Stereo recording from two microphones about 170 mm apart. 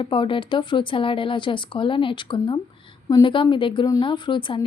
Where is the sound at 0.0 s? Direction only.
30° left (ahead or behind).